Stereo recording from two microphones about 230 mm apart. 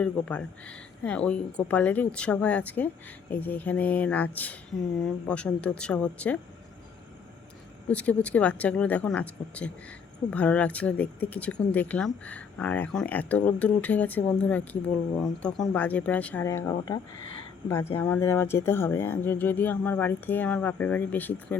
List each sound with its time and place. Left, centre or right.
0.0 s speech: centre
7.9 s speech: centre